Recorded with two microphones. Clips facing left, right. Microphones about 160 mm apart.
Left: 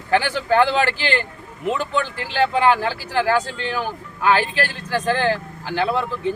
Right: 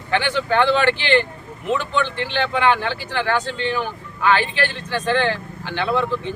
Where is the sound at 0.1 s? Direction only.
40° left (ahead or behind).